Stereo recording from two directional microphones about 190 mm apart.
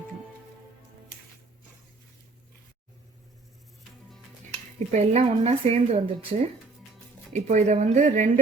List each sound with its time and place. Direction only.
4.9 s speech: 35° right (ahead or behind)